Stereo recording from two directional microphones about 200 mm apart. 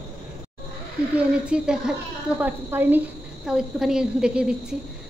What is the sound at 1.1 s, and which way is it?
A woman's voice, 5° right (ahead or behind).